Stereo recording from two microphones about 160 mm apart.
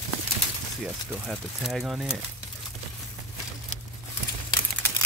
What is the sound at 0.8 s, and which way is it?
Speech, centre (ahead or behind).